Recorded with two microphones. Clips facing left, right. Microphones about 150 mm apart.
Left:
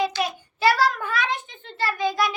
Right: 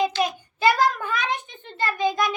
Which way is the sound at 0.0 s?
20° right (ahead or behind).